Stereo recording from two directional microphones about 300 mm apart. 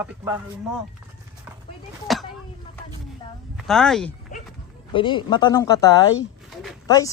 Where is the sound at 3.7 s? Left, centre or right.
Centre.